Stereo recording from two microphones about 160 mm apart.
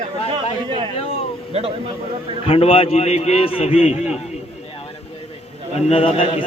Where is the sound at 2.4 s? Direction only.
40° left (ahead or behind).